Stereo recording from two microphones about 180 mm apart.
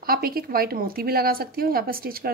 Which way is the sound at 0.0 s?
55° right (ahead or behind).